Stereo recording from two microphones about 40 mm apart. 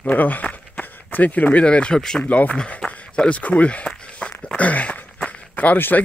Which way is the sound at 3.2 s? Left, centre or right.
Left.